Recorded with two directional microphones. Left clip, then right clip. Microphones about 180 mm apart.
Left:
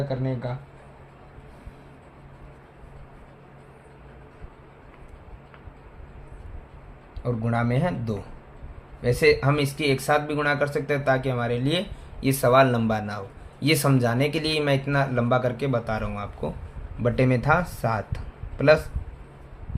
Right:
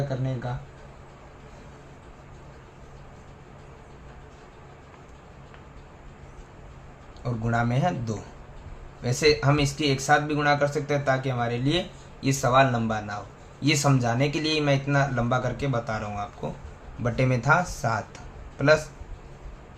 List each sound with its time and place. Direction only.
7.2 s speech: 25° left (ahead or behind)